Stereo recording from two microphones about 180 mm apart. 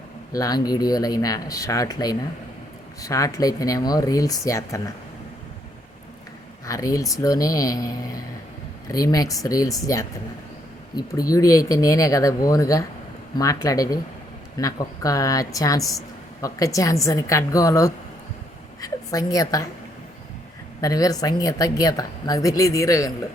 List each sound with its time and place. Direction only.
0.3 s a woman's voice: 20° left (ahead or behind)
6.7 s a woman's voice: 20° left (ahead or behind)
20.8 s a woman's voice: 20° left (ahead or behind)